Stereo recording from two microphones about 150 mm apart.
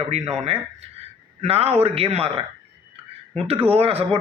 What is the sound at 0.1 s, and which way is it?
A man's voice, 45° right (ahead or behind).